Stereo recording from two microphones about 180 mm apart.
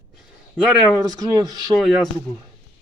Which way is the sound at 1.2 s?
20° right (ahead or behind).